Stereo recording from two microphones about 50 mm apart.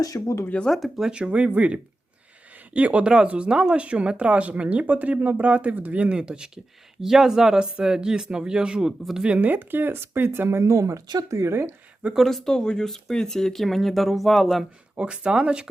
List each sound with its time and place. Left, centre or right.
0.7 s speech: centre
1.0 s speech: centre
9.5 s speech: right
12.1 s speech: centre
14.9 s speech: right